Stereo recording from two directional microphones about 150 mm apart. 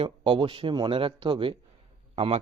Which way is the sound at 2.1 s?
45° right (ahead or behind).